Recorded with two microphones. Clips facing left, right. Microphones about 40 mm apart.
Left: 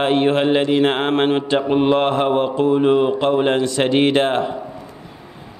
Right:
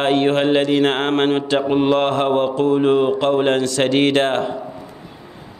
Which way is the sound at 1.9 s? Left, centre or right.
Centre.